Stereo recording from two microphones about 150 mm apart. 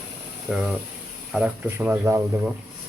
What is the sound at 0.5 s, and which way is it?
Speech, 5° right (ahead or behind).